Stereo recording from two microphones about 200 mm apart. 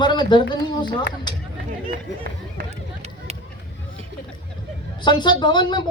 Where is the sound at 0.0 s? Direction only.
20° left (ahead or behind).